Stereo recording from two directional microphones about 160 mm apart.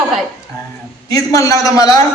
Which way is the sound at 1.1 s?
20° left (ahead or behind).